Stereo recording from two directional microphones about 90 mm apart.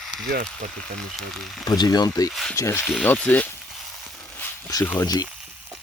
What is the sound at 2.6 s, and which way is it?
Speech, 30° left (ahead or behind).